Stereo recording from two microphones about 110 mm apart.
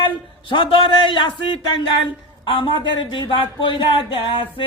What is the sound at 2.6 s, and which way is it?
Speech, 45° left (ahead or behind).